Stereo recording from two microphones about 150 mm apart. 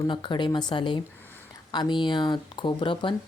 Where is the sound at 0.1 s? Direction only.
30° left (ahead or behind).